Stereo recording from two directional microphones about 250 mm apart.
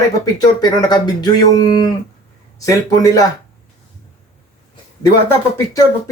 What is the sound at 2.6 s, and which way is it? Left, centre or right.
Speech, centre.